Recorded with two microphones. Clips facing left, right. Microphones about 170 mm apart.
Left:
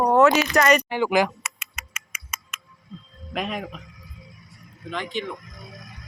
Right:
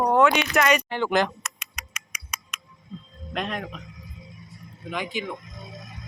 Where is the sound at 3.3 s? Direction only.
5° left (ahead or behind).